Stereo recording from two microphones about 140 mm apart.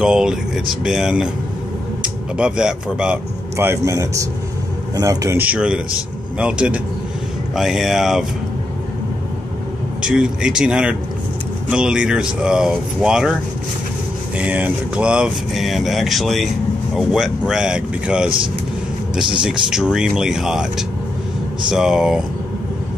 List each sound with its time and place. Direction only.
0.0 s speech: 5° right (ahead or behind)
2.3 s speech: 5° right (ahead or behind)
3.5 s speech: 20° right (ahead or behind)
5.4 s speech: 10° right (ahead or behind)
10.0 s speech: 5° right (ahead or behind)
19.4 s speech: 5° right (ahead or behind)